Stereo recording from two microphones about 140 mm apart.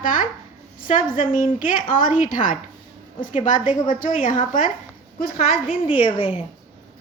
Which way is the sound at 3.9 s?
70° left (ahead or behind).